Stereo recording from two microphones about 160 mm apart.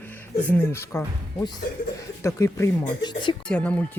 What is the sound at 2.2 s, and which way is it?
Speech, 20° left (ahead or behind).